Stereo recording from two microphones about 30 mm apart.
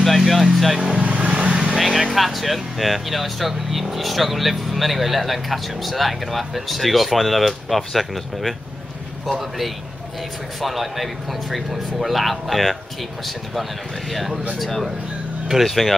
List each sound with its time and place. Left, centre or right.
0.0 s vehicle: centre
0.7 s speech: right
1.0 s vehicle: right
1.3 s vehicle: right
1.7 s speech: centre
14.6 s speech: centre